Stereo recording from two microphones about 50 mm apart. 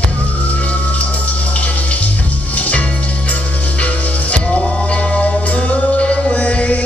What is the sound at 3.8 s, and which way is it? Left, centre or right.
Music, left.